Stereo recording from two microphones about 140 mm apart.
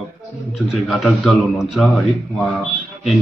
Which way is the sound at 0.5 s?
Centre (ahead or behind).